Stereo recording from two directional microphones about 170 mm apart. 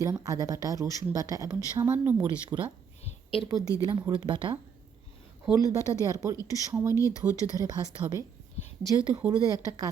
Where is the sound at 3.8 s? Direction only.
20° right (ahead or behind).